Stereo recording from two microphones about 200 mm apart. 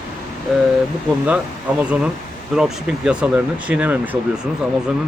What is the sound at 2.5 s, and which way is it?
Speech, 5° right (ahead or behind).